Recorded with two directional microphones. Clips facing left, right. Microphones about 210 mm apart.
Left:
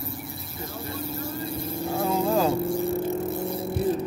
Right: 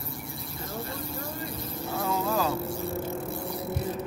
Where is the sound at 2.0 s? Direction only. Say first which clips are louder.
Left 5 dB; 30° left (ahead or behind).